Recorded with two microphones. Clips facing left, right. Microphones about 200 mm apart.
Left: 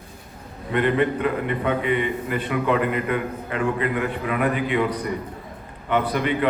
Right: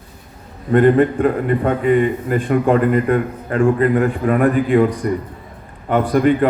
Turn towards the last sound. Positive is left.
turn(degrees=-45)  # may be behind; listen again after turning